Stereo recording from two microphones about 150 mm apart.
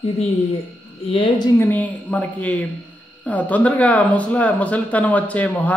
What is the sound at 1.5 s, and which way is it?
Speech, 10° left (ahead or behind).